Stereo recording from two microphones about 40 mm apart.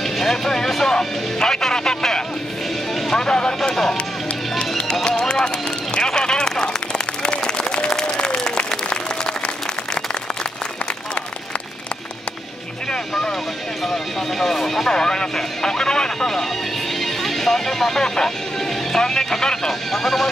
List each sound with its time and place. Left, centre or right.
0.0 s vehicle: centre
0.9 s music: centre
3.1 s speech: centre
4.6 s music: centre
5.9 s a sound: centre
7.2 s applause: left
14.4 s speech: centre
17.0 s speech: centre
18.9 s music: centre
19.9 s speech: centre